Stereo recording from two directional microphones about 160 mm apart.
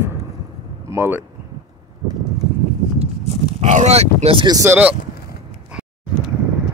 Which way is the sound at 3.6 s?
45° right (ahead or behind).